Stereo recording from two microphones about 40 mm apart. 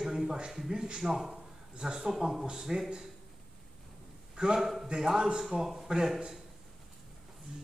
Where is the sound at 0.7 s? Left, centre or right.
Centre.